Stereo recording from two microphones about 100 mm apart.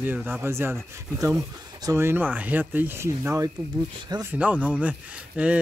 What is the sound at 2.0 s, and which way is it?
A man's voice, 20° right (ahead or behind).